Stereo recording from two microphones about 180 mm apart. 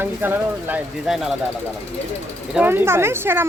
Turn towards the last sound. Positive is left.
turn(degrees=-10)  # may be behind; listen again after turning